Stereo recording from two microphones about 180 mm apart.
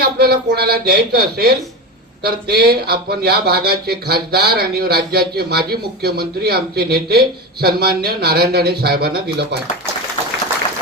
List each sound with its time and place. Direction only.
0.0 s speech: 60° right (ahead or behind)